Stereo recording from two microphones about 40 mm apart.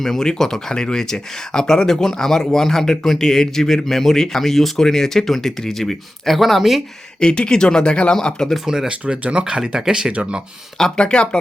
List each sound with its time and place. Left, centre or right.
0.0 s speech: centre
7.2 s speech: left
8.1 s speech: centre
8.6 s speech: centre
8.9 s speech: right
9.4 s speech: centre
10.1 s speech: right
10.9 s speech: left